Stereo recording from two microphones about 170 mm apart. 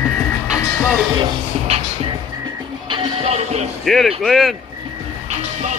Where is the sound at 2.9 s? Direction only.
35° right (ahead or behind).